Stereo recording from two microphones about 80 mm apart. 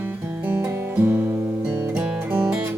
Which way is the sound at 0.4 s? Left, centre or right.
Right.